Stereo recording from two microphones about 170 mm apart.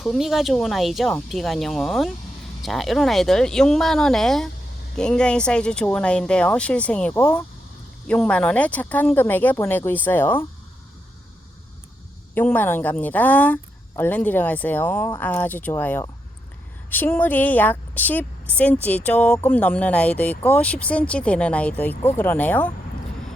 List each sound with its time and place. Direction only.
0.0 s speech: centre (ahead or behind)
12.3 s speech: 10° left (ahead or behind)